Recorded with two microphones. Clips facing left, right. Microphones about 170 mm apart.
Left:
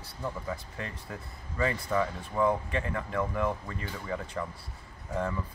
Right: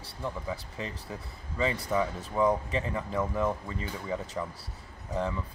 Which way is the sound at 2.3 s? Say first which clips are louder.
Right 1 dB; 5° right (ahead or behind).